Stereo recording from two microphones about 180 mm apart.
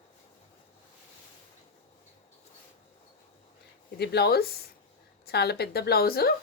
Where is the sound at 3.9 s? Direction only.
65° left (ahead or behind).